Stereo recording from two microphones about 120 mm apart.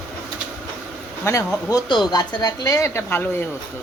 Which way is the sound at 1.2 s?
30° left (ahead or behind).